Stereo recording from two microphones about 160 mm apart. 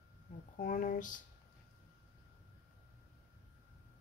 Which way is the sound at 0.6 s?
55° left (ahead or behind).